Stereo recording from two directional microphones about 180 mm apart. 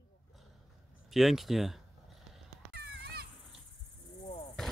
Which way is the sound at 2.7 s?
65° right (ahead or behind).